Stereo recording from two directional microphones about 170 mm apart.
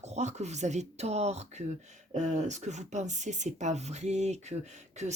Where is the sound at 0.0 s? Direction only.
40° right (ahead or behind).